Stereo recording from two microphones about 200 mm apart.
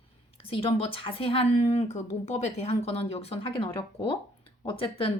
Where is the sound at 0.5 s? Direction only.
30° left (ahead or behind).